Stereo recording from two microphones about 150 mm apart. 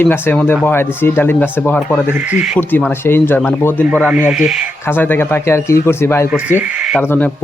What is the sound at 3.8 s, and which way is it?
Speech, 10° right (ahead or behind).